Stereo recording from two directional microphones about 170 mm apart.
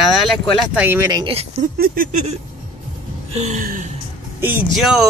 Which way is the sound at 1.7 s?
60° right (ahead or behind).